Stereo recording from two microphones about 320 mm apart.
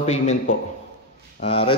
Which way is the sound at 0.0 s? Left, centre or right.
Left.